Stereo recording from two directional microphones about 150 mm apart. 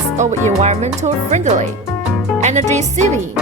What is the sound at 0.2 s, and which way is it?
Speech, 50° right (ahead or behind).